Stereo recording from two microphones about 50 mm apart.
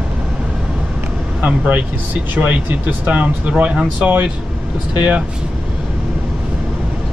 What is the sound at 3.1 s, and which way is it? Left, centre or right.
Speech, right.